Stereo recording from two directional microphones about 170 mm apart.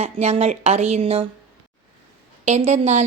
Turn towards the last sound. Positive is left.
turn(degrees=-40)  # may be behind; listen again after turning